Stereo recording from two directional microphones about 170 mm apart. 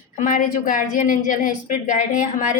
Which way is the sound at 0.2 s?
50° left (ahead or behind).